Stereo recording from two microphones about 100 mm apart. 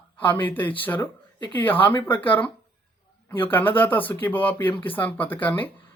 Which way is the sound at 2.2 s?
15° left (ahead or behind).